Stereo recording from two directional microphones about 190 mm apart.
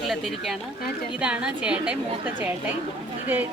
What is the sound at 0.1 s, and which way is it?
A woman's voice, centre (ahead or behind).